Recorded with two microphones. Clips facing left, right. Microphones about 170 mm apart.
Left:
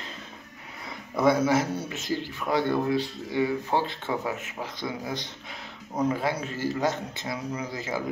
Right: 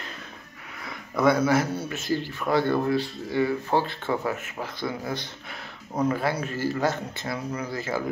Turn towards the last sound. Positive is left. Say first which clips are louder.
# right 2 dB
turn(degrees=15)  # may be behind; listen again after turning